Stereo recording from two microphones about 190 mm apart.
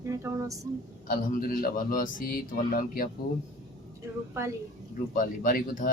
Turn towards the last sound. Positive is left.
turn(degrees=45)  # may be behind; listen again after turning